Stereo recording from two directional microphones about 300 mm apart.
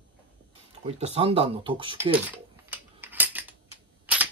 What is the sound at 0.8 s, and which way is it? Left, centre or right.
Speech, centre.